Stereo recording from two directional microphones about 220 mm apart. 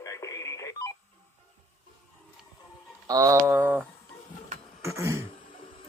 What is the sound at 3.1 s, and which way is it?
Speech, 15° right (ahead or behind).